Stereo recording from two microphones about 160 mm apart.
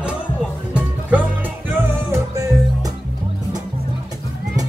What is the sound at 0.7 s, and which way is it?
Music, 10° right (ahead or behind).